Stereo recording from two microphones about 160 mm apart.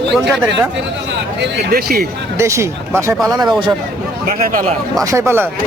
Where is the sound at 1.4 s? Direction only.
70° right (ahead or behind).